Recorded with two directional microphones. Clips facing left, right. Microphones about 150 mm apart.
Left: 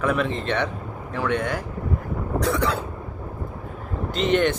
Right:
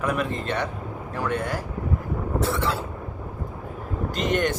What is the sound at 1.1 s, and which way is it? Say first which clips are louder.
Speech: left 3 dB; 10° right (ahead or behind).